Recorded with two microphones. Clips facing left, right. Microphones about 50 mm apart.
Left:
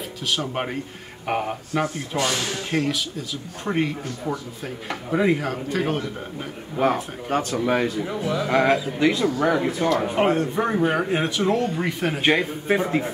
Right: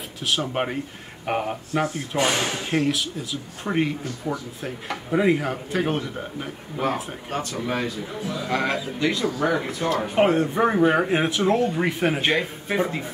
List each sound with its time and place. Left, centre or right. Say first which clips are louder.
0.4 s speech: right 1 dB; centre
1.2 s speech: even; centre
2.1 s speech: right 2 dB; right
2.7 s speech: even; centre
7.5 s speech: left 5 dB; centre
10.1 s speech: right 1 dB; centre
12.2 s speech: left 2 dB; centre